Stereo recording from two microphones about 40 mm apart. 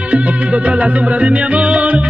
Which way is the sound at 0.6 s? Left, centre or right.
Right.